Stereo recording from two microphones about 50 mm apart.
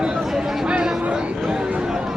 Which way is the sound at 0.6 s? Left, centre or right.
Right.